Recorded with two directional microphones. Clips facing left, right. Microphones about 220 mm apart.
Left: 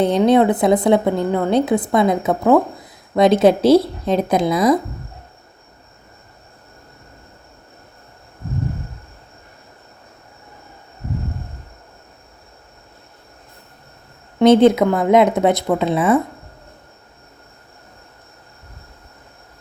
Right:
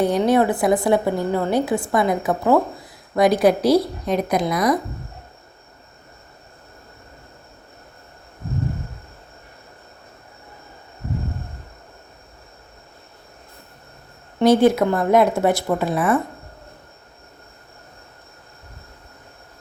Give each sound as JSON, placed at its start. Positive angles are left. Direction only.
{"t": 0.0, "sound": "a woman's voice", "side_deg": 20}
{"t": 14.3, "sound": "a woman's voice", "side_deg": 20}